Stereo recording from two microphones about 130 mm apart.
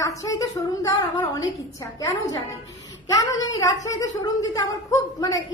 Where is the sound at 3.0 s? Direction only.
25° left (ahead or behind).